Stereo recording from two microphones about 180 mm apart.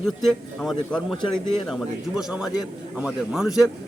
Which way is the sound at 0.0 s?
Centre (ahead or behind).